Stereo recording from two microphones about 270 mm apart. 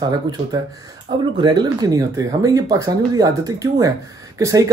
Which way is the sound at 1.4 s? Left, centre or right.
Centre.